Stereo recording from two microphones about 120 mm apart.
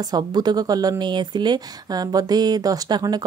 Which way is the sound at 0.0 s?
35° right (ahead or behind).